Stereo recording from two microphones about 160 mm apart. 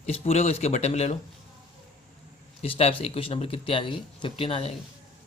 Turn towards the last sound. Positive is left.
turn(degrees=35)  # may be behind; listen again after turning